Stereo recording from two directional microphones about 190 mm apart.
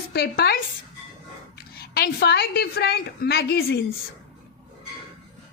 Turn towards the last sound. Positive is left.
turn(degrees=55)  # may be behind; listen again after turning